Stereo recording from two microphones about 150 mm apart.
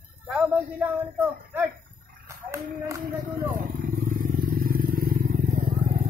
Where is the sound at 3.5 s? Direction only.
65° right (ahead or behind).